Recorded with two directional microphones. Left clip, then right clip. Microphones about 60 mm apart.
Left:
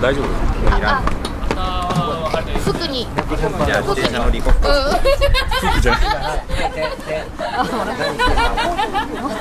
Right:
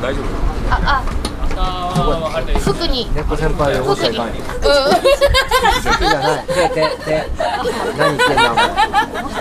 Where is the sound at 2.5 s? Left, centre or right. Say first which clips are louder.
Right 2 dB; centre.